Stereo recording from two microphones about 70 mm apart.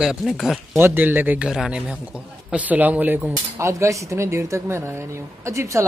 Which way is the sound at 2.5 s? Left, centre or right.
Right.